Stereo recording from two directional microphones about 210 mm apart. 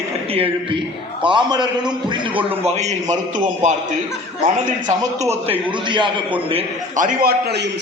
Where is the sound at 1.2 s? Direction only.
20° right (ahead or behind).